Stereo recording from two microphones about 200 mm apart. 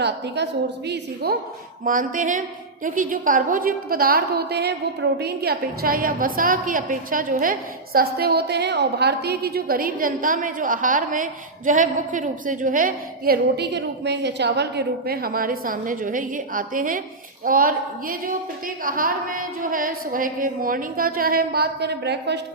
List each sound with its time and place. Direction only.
0.9 s a woman's voice: 50° right (ahead or behind)
1.8 s a woman's voice: 40° right (ahead or behind)